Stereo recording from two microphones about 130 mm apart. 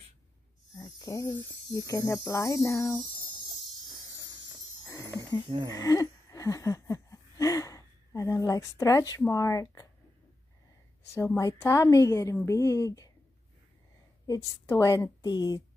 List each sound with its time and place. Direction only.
0.7 s speech: 25° left (ahead or behind)
4.8 s a sound: 25° left (ahead or behind)
11.1 s speech: 20° left (ahead or behind)
14.2 s speech: 25° left (ahead or behind)